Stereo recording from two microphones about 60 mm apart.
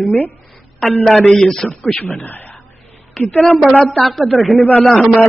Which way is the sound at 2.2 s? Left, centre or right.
Left.